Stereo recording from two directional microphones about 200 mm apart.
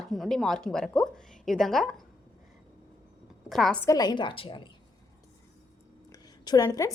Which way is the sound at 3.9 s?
20° left (ahead or behind).